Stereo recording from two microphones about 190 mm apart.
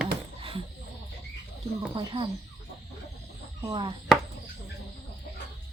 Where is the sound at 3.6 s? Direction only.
25° right (ahead or behind).